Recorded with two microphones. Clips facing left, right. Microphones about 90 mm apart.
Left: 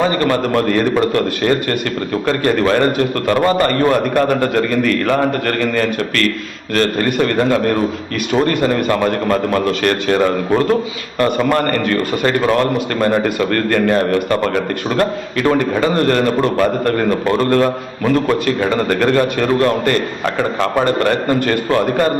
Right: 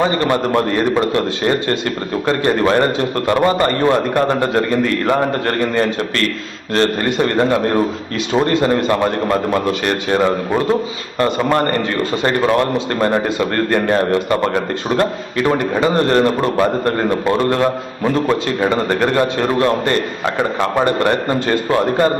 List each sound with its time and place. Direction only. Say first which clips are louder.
0.0 s a man's voice: even; 20° right (ahead or behind)